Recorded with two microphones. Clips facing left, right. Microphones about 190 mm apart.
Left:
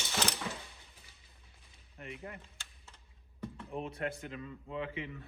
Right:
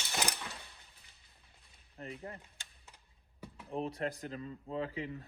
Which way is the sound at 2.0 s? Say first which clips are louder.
Right 1 dB; 35° right (ahead or behind).